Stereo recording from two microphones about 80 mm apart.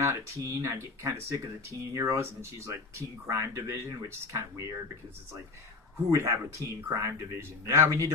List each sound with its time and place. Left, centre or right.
0.0 s speech: right
6.0 s speech: right